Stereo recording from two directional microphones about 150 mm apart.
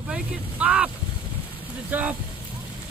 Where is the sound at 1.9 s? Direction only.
10° right (ahead or behind).